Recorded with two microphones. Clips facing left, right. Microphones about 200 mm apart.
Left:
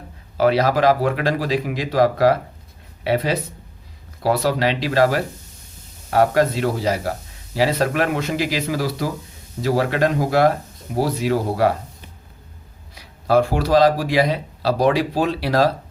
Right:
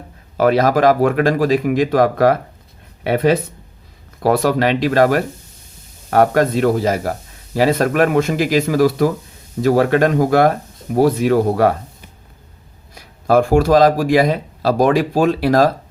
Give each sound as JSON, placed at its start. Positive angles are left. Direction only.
{"t": 0.3, "sound": "speech", "side_deg": -50}
{"t": 12.9, "sound": "speech", "side_deg": -50}